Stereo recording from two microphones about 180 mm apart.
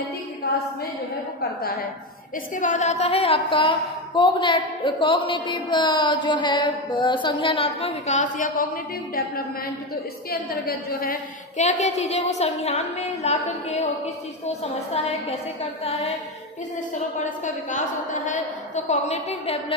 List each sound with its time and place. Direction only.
1.4 s a woman's voice: 55° left (ahead or behind)
2.5 s a woman's voice: 45° left (ahead or behind)
10.5 s a woman's voice: 60° left (ahead or behind)
11.5 s a woman's voice: 40° left (ahead or behind)
17.2 s a woman's voice: 45° left (ahead or behind)